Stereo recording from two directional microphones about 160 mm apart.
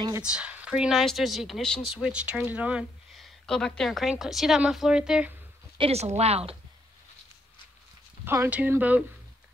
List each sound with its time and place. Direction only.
0.2 s speech: 5° right (ahead or behind)
5.8 s speech: 40° right (ahead or behind)
8.3 s speech: 15° right (ahead or behind)